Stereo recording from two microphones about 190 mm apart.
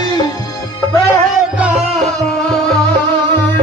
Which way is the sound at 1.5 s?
5° right (ahead or behind).